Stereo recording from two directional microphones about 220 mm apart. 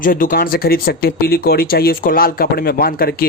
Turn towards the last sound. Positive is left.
turn(degrees=40)  # may be behind; listen again after turning